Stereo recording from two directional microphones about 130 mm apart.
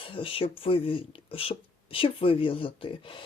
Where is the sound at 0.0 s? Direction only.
45° left (ahead or behind).